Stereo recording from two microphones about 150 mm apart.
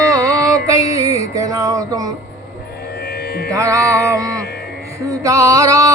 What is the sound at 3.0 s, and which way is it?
Music, 90° left.